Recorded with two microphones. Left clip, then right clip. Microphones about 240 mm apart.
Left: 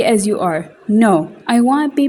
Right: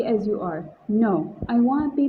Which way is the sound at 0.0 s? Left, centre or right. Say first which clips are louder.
Left 9 dB; left.